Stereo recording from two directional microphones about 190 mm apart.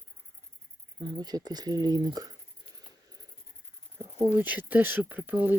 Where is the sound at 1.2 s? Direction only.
20° right (ahead or behind).